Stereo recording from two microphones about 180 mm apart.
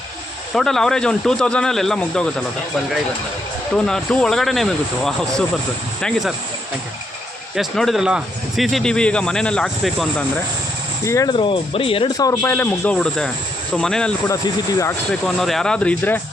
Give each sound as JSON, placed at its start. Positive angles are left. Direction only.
{"t": 0.5, "sound": "speech", "side_deg": 0}
{"t": 3.8, "sound": "speech", "side_deg": 5}
{"t": 7.5, "sound": "speech", "side_deg": 0}
{"t": 11.0, "sound": "speech", "side_deg": 15}
{"t": 14.3, "sound": "speech", "side_deg": 20}
{"t": 15.2, "sound": "speech", "side_deg": 0}